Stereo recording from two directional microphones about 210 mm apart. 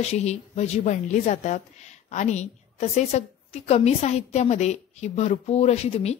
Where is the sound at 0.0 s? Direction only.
30° left (ahead or behind).